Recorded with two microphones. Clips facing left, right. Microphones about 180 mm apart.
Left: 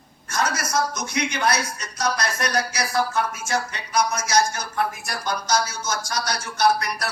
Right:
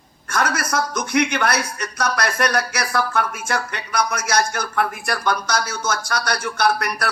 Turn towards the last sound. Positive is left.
turn(degrees=-60)  # may be behind; listen again after turning